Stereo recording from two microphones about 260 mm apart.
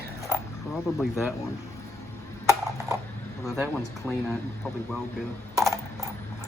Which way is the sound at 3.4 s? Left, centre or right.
Centre.